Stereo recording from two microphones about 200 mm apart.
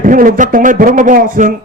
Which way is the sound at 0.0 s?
45° right (ahead or behind).